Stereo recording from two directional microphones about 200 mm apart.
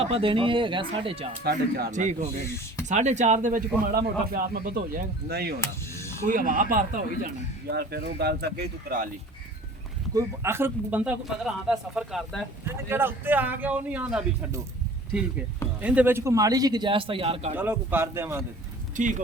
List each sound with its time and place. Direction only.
0.0 s a man's voice: 30° right (ahead or behind)
1.5 s a man's voice: 50° right (ahead or behind)
1.9 s a man's voice: 40° right (ahead or behind)
5.5 s music: 15° left (ahead or behind)
6.2 s a man's voice: 40° right (ahead or behind)
7.7 s speech: 55° right (ahead or behind)
10.2 s speech: 10° right (ahead or behind)
12.7 s a man's voice: 10° right (ahead or behind)
15.8 s a man's voice: 5° right (ahead or behind); by 17.5 s 30° right (ahead or behind)
17.6 s a man's voice: 10° right (ahead or behind)
18.9 s speech: 40° right (ahead or behind)